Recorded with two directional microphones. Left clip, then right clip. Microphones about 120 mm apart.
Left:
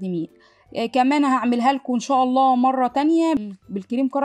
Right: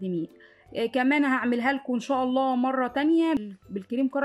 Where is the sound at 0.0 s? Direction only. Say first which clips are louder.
Left 3 dB; 30° left (ahead or behind).